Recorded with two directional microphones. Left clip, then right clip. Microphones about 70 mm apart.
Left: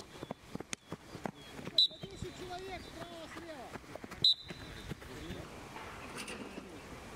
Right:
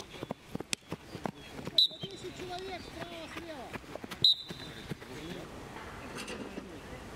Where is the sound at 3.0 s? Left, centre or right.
Right.